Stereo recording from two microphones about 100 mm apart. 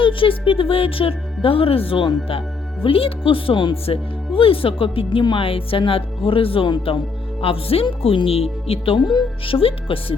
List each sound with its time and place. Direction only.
0.0 s speech: 60° left (ahead or behind)
7.4 s speech: 70° left (ahead or behind)